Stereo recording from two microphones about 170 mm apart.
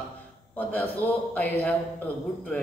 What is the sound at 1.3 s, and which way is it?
Speech, 10° left (ahead or behind).